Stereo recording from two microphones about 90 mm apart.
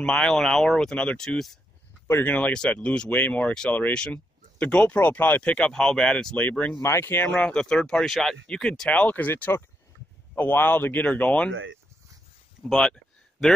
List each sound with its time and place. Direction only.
0.0 s speech: 5° left (ahead or behind)
2.0 s speech: 20° left (ahead or behind)
6.8 s speech: 30° left (ahead or behind)
7.3 s speech: 10° left (ahead or behind)
12.6 s a sound: 5° left (ahead or behind)